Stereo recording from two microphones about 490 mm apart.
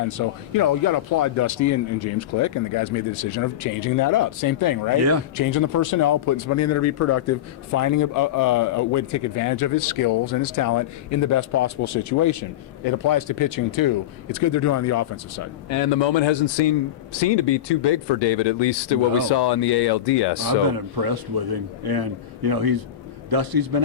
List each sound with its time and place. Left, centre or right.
0.2 s speech: left
15.9 s a man's voice: left
20.7 s a man's voice: right